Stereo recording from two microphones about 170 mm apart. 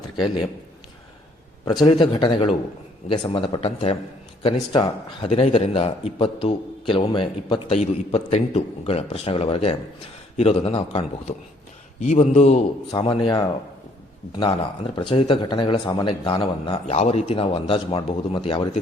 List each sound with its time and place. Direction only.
1.6 s a man's voice: 25° left (ahead or behind)
5.2 s a man's voice: 35° left (ahead or behind)
12.9 s speech: 25° left (ahead or behind)
16.8 s a man's voice: 40° left (ahead or behind)